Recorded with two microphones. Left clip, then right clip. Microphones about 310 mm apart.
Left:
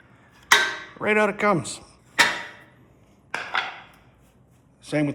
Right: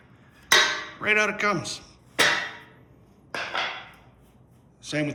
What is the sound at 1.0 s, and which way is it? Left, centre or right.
Speech, centre.